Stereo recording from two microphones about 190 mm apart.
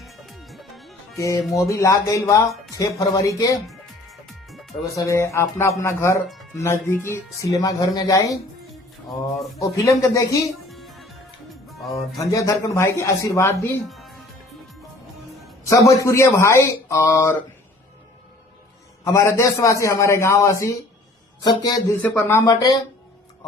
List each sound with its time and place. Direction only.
0.0 s music: centre (ahead or behind)
1.1 s speech: 15° left (ahead or behind)
3.7 s music: centre (ahead or behind)
4.9 s speech: 15° left (ahead or behind)
9.6 s speech: 15° left (ahead or behind)
10.7 s music: centre (ahead or behind)
12.1 s speech: 20° left (ahead or behind)
13.8 s music: centre (ahead or behind)
15.7 s speech: 15° left (ahead or behind)
19.0 s speech: 15° left (ahead or behind)
22.0 s speech: 10° left (ahead or behind)